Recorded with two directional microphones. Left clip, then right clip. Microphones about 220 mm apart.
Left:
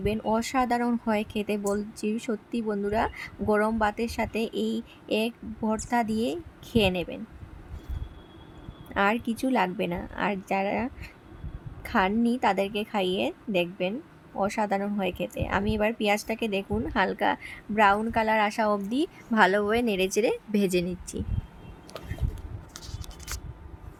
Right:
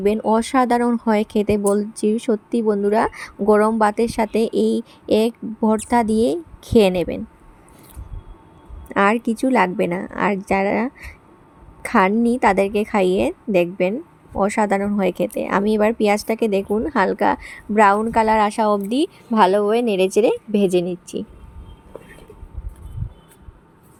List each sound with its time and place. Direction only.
0.0 s a woman's voice: 20° right (ahead or behind)
8.9 s a woman's voice: 20° right (ahead or behind)